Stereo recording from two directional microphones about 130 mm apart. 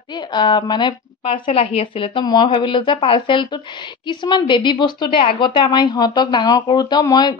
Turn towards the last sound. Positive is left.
turn(degrees=30)  # may be behind; listen again after turning